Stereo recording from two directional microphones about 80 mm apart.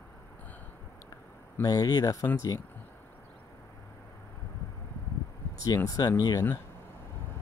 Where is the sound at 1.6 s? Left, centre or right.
Left.